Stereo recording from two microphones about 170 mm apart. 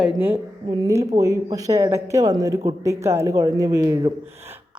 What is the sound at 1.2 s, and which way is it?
Speech, 20° right (ahead or behind).